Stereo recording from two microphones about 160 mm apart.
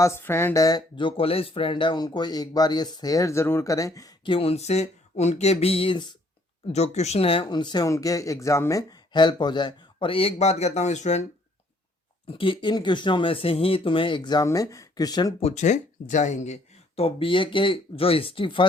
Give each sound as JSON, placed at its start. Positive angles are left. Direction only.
{"t": 0.0, "sound": "speech", "side_deg": 15}
{"t": 6.7, "sound": "speech", "side_deg": 45}
{"t": 12.3, "sound": "speech", "side_deg": 30}
{"t": 15.4, "sound": "speech", "side_deg": 45}